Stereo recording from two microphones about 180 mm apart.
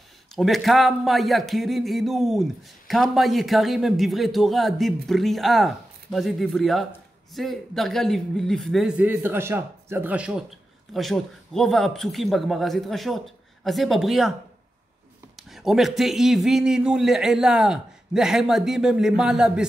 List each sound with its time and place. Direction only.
0.4 s a man's voice: centre (ahead or behind)
15.5 s a man's voice: centre (ahead or behind)